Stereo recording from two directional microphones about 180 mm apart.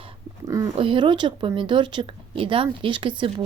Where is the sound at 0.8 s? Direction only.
30° right (ahead or behind).